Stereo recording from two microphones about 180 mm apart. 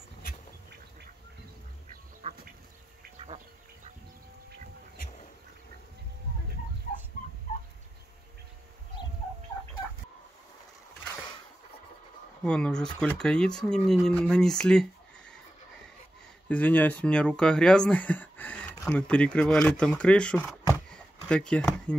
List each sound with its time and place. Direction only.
2.2 s duck: 35° right (ahead or behind)
12.4 s speech: 5° left (ahead or behind)
16.4 s speech: 10° left (ahead or behind)
20.9 s a sound: 5° left (ahead or behind)